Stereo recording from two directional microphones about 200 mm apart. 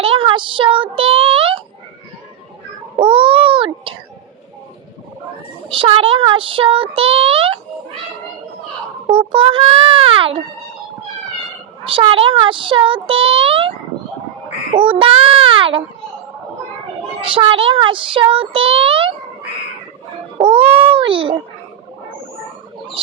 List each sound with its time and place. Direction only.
0.0 s child singing: 25° right (ahead or behind)
3.0 s child singing: 25° right (ahead or behind)
5.6 s child singing: 25° right (ahead or behind)
9.0 s child singing: 25° right (ahead or behind)
11.9 s child singing: 25° right (ahead or behind)
14.7 s a child's voice: 25° right (ahead or behind)
17.2 s child singing: 25° right (ahead or behind)
20.4 s a child's voice: 25° right (ahead or behind)